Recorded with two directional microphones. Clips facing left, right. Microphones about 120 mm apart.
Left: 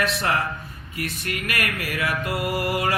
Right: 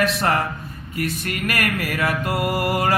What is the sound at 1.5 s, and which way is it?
Mantra, 45° right (ahead or behind).